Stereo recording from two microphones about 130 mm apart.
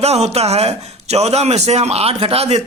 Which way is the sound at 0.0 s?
55° right (ahead or behind).